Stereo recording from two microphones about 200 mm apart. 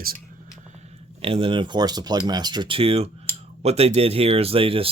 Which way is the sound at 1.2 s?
25° right (ahead or behind).